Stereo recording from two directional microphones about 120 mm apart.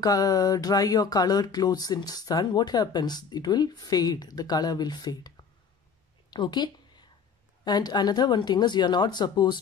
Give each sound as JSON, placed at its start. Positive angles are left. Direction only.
{"t": 0.0, "sound": "speech", "side_deg": 30}
{"t": 6.3, "sound": "a sound", "side_deg": 35}
{"t": 7.6, "sound": "speech", "side_deg": 35}